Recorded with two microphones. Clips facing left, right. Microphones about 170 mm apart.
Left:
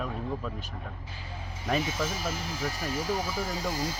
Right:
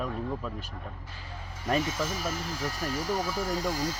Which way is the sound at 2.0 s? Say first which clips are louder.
Even; centre (ahead or behind).